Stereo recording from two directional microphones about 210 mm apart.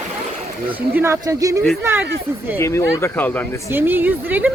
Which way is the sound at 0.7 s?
10° right (ahead or behind).